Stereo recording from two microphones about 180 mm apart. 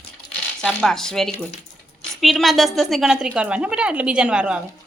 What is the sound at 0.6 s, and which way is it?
A woman's voice, 5° left (ahead or behind).